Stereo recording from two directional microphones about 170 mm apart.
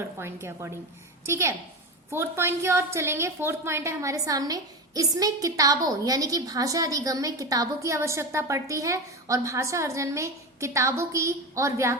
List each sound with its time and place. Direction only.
0.2 s a woman's voice: 15° right (ahead or behind)